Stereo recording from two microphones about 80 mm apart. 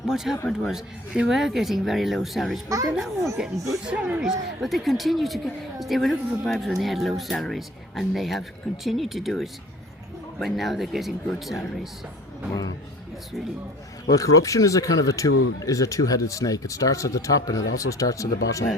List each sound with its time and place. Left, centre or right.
0.7 s speech: centre
2.6 s a child's voice: right
2.9 s speech: centre
4.2 s speech: centre
10.4 s speech: centre
14.1 s speech: left